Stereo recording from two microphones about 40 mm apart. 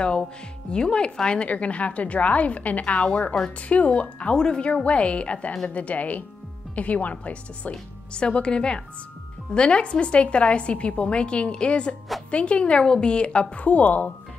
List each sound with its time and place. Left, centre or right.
0.7 s a woman's voice: left
8.1 s a woman's voice: left
13.7 s speech: left